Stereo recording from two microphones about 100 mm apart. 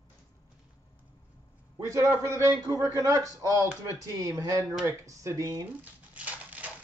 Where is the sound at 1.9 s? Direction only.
30° right (ahead or behind).